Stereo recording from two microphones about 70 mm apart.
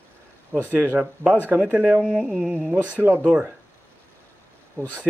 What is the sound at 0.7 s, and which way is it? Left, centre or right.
Speech, right.